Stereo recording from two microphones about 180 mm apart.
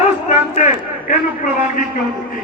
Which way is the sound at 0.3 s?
40° left (ahead or behind).